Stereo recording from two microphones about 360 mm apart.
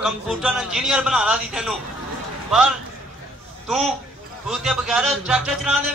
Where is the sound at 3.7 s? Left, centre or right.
Centre.